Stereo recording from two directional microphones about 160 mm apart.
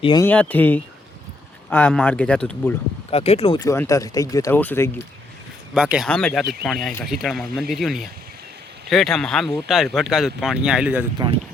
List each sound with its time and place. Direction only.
0.2 s speech: 10° left (ahead or behind)
3.1 s speech: 40° left (ahead or behind)
3.6 s speech: 20° left (ahead or behind)
5.7 s speech: 5° right (ahead or behind)